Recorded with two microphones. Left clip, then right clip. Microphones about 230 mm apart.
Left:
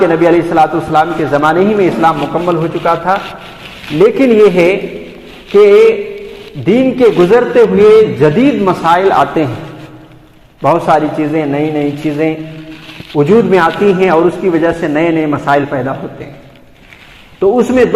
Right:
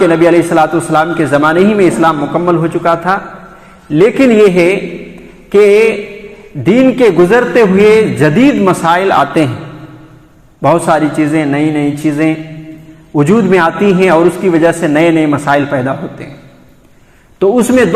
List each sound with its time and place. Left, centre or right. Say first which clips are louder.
0.0 s a man's voice: right 1 dB; right
10.6 s a man's voice: even; right
17.4 s a man's voice: even; right